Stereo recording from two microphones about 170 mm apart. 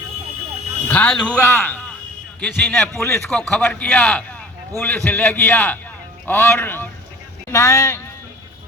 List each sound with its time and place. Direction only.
0.9 s a man's voice: 5° left (ahead or behind)